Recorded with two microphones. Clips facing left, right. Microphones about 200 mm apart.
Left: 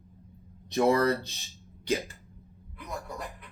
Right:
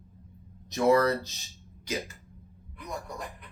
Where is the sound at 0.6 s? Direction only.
30° left (ahead or behind).